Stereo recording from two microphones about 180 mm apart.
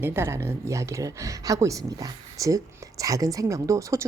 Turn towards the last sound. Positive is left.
turn(degrees=-15)  # may be behind; listen again after turning